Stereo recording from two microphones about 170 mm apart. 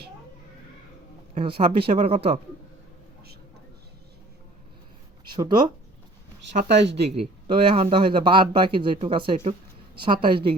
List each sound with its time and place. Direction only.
1.4 s speech: 30° right (ahead or behind)
5.4 s speech: 25° right (ahead or behind)
6.7 s speech: 90° right
6.9 s speech: 35° right (ahead or behind)